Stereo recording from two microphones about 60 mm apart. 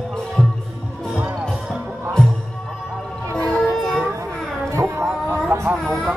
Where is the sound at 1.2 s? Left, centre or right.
Right.